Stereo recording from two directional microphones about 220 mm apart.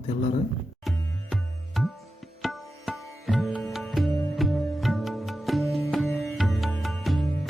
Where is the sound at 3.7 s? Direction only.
Centre (ahead or behind).